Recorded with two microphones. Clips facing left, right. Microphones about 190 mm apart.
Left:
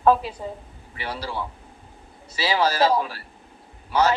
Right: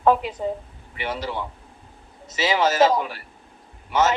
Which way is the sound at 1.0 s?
20° right (ahead or behind).